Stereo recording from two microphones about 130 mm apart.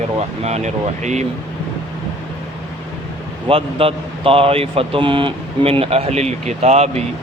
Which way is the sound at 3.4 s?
45° right (ahead or behind).